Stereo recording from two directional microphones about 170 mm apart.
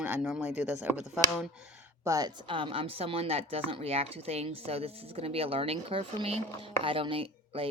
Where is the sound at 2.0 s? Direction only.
20° right (ahead or behind).